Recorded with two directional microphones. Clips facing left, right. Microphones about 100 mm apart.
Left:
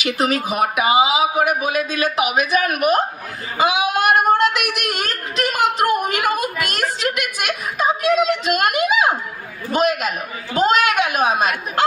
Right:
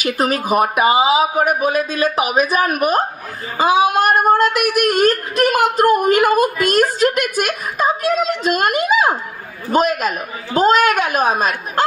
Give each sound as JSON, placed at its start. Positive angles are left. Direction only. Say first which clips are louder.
{"t": 0.0, "sound": "a woman's voice", "louder": "right 1 dB", "side_deg": -45}